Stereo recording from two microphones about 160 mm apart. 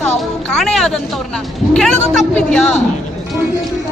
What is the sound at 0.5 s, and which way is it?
Speech, centre (ahead or behind).